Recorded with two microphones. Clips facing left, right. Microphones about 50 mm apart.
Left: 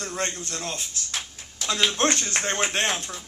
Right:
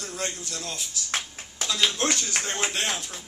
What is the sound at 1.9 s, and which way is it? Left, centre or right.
A man's voice, left.